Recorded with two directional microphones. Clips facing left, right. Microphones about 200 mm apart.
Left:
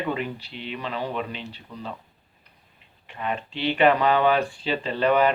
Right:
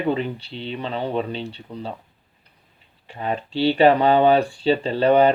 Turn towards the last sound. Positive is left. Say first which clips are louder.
# right 5 dB
turn(degrees=-30)  # may be behind; listen again after turning